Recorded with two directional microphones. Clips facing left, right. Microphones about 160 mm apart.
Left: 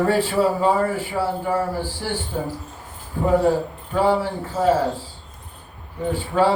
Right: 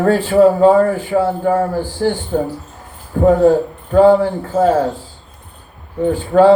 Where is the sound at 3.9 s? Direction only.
45° right (ahead or behind).